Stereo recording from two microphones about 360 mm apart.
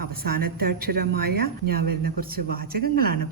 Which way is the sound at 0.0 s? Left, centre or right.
Right.